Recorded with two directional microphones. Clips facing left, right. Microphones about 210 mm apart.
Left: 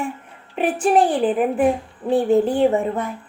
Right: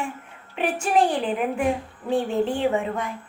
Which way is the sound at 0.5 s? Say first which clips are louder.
Left 5 dB; 35° left (ahead or behind).